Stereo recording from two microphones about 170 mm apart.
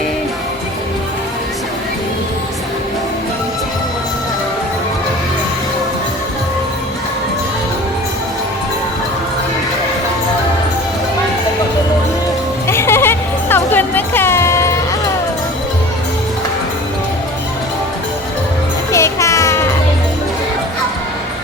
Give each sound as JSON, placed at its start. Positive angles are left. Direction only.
{"t": 12.6, "sound": "music", "side_deg": 15}
{"t": 18.9, "sound": "music", "side_deg": 15}